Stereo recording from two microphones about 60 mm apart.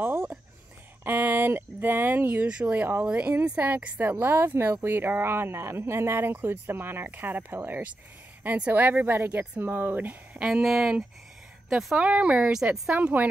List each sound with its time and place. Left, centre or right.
0.0 s a sound: right
1.0 s speech: right
10.4 s speech: centre
11.9 s speech: right